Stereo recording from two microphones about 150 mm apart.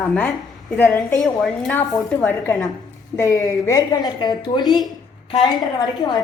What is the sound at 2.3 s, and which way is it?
A woman's voice, 20° left (ahead or behind).